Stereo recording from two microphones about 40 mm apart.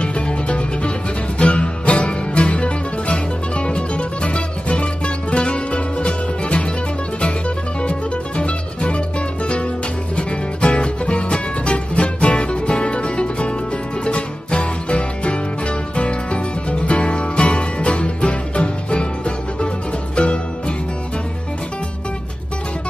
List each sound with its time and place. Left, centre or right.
0.0 s music: left